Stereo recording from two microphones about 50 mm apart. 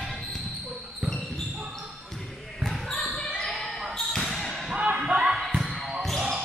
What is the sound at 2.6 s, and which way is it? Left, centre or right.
Basketball bounce, centre.